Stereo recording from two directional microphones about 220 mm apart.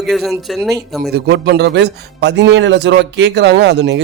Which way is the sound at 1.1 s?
50° right (ahead or behind).